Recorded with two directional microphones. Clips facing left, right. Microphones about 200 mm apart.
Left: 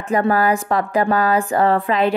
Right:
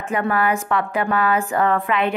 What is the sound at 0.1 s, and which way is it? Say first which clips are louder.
A woman's voice: left 4 dB; 35° left (ahead or behind).